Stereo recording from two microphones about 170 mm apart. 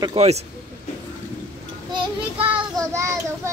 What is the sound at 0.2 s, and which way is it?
Speech, 35° right (ahead or behind).